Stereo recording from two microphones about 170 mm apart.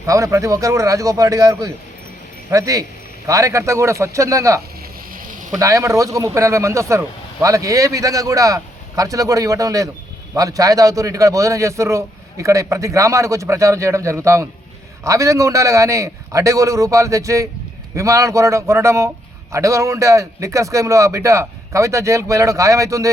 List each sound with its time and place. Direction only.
0.0 s a man's voice: 20° right (ahead or behind)
5.1 s a sound: 50° right (ahead or behind)
5.5 s a man's voice: 20° right (ahead or behind)